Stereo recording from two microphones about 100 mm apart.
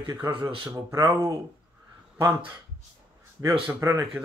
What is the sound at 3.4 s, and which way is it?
Speech, 30° right (ahead or behind).